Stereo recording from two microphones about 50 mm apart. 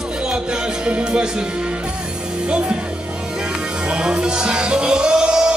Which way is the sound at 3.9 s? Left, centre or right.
Centre.